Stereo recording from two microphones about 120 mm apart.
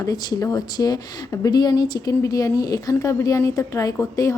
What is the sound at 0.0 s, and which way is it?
A woman's voice, 30° left (ahead or behind).